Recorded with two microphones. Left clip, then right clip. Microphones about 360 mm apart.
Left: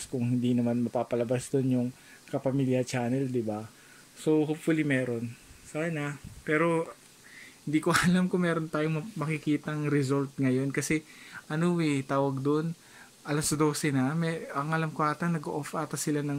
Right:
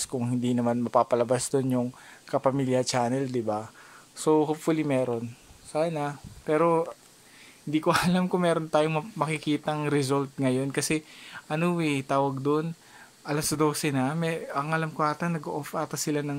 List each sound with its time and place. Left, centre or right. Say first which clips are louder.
0.1 s speech: left 1 dB; right
5.9 s speech: right 4 dB; centre